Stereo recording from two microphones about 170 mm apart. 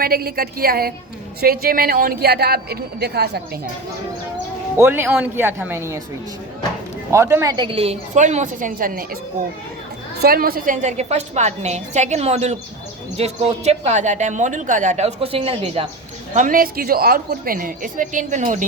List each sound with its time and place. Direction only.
0.0 s speech: 65° right (ahead or behind)
4.8 s speech: 15° right (ahead or behind)
7.1 s speech: 15° right (ahead or behind)
7.5 s a woman's voice: 30° right (ahead or behind); by 9.0 s 55° right (ahead or behind)
10.2 s a woman's voice: 65° right (ahead or behind); by 15.9 s 35° right (ahead or behind)
16.3 s a woman's voice: 50° right (ahead or behind)